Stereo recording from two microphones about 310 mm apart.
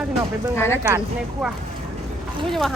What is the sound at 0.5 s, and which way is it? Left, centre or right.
Speech, centre.